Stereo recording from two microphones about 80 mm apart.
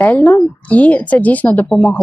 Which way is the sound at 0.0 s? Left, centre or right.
Left.